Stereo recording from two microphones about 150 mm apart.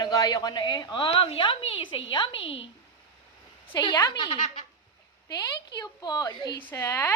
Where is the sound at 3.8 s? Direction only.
25° left (ahead or behind).